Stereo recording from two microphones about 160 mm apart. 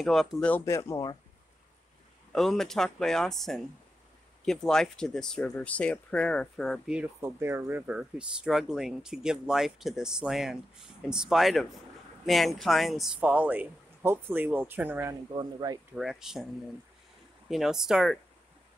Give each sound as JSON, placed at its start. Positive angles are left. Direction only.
{"t": 0.0, "sound": "speech", "side_deg": 0}
{"t": 2.3, "sound": "speech", "side_deg": 0}
{"t": 7.2, "sound": "speech", "side_deg": -15}
{"t": 15.3, "sound": "speech", "side_deg": -25}
{"t": 16.0, "sound": "speech", "side_deg": 0}
{"t": 17.5, "sound": "speech", "side_deg": 0}